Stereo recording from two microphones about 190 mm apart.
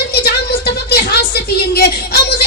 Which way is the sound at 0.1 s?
55° left (ahead or behind).